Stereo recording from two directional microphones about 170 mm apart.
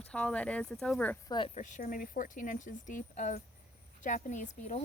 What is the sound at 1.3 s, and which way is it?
Speech, 30° left (ahead or behind).